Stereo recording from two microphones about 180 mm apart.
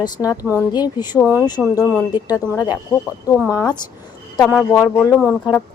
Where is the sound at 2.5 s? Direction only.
25° left (ahead or behind).